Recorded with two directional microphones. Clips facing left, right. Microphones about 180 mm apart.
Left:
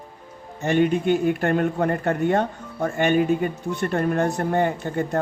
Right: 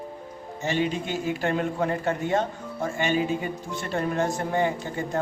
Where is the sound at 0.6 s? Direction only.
55° left (ahead or behind).